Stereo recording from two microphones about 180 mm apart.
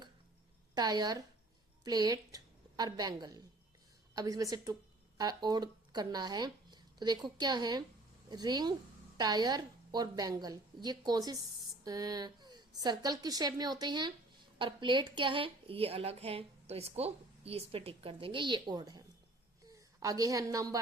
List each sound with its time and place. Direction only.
0.7 s a woman's voice: 20° right (ahead or behind)